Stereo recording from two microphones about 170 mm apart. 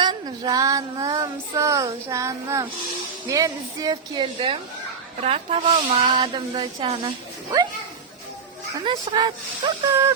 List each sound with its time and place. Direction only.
0.0 s child singing: 25° right (ahead or behind)
5.2 s speech: 35° right (ahead or behind)
8.8 s child singing: 30° right (ahead or behind)